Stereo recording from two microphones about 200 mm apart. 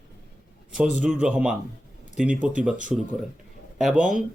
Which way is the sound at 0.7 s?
5° right (ahead or behind).